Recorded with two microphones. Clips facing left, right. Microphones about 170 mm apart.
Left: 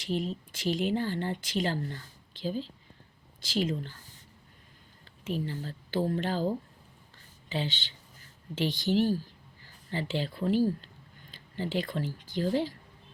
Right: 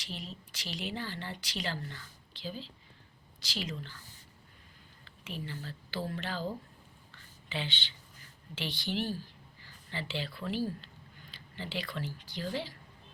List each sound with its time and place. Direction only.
0.0 s speech: 50° left (ahead or behind)
5.2 s speech: 40° left (ahead or behind)
7.5 s speech: 40° left (ahead or behind)